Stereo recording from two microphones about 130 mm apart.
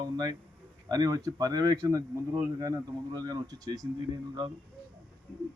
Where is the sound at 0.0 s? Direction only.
35° right (ahead or behind).